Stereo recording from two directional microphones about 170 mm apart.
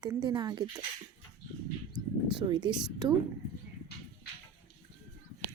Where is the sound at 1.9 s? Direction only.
25° right (ahead or behind).